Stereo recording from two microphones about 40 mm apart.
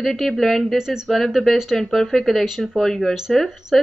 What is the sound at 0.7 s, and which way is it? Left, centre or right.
Speech, centre.